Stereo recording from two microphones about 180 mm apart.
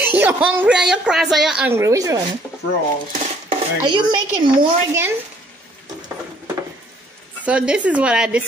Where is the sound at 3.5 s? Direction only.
25° right (ahead or behind).